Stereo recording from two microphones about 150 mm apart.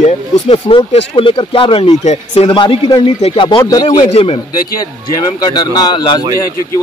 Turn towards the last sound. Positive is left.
turn(degrees=30)  # may be behind; listen again after turning